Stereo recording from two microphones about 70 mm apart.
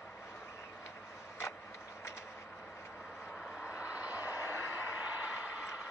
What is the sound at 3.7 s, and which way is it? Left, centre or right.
Vehicle, left.